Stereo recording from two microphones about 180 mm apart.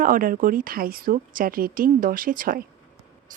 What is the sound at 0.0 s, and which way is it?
Speech, 50° right (ahead or behind).